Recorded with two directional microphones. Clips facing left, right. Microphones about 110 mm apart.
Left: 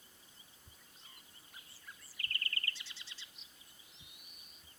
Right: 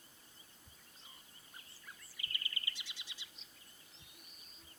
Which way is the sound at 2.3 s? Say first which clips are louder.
Left 3 dB; 15° right (ahead or behind).